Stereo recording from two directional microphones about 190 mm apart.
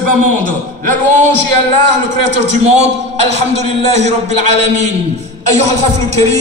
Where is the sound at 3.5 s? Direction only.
35° right (ahead or behind).